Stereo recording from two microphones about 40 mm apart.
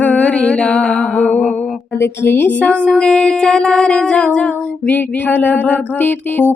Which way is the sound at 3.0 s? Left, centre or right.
Left.